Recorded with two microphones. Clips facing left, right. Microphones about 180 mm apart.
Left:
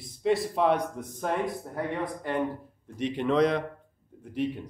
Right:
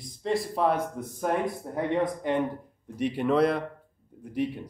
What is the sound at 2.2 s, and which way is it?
A man's voice, 20° right (ahead or behind).